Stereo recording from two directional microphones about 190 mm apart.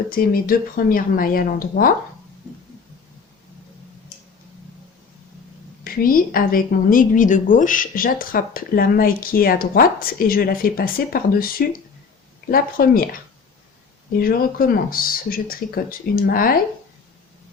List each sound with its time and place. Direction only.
0.1 s a woman's voice: 50° left (ahead or behind)
5.8 s a woman's voice: 50° left (ahead or behind)
14.2 s a woman's voice: 50° left (ahead or behind)